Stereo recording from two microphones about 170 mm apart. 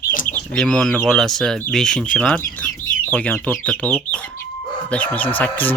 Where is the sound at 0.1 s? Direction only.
50° left (ahead or behind).